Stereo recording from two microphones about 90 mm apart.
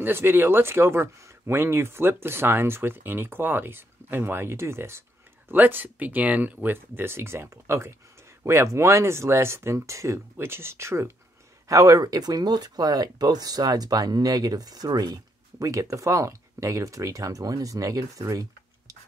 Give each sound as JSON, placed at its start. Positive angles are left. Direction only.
{"t": 0.0, "sound": "speech", "side_deg": -25}